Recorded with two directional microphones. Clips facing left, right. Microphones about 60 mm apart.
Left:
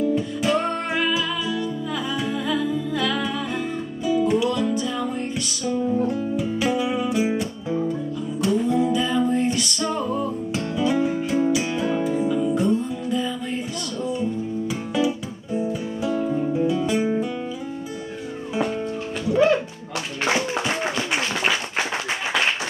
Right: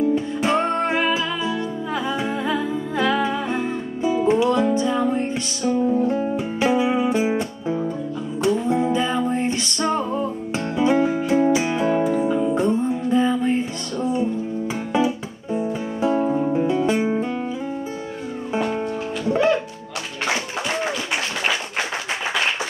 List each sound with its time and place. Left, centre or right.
0.4 s music: right
14.7 s music: right